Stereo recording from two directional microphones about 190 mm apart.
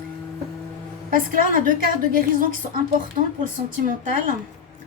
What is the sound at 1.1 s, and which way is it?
A woman's voice, 45° right (ahead or behind).